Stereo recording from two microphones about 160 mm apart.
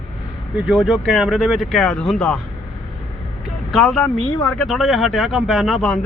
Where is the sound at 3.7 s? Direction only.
Centre (ahead or behind).